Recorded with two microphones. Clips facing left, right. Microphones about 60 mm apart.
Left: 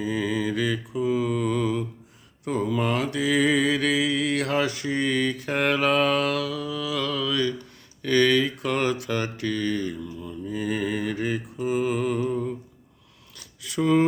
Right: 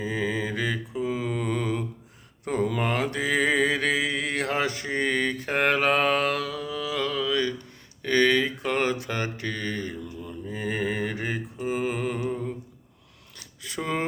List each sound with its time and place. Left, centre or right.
0.0 s mantra: right
13.7 s speech: right